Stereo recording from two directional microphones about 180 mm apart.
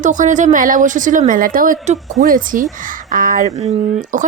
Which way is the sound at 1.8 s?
40° right (ahead or behind).